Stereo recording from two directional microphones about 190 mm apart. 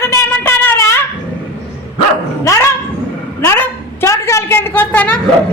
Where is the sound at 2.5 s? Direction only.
15° left (ahead or behind).